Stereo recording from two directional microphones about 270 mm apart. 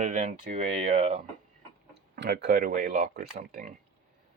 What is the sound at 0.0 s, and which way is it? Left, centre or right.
Speech, right.